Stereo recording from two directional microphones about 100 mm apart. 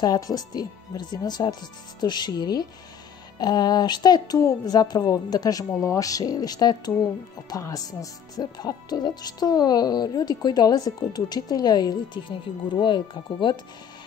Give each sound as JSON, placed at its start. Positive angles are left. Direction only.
{"t": 0.0, "sound": "speech", "side_deg": 40}